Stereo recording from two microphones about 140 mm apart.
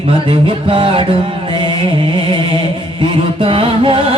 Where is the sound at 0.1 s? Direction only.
40° right (ahead or behind).